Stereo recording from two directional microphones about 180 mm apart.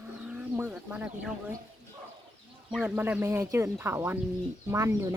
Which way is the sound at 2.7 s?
10° right (ahead or behind).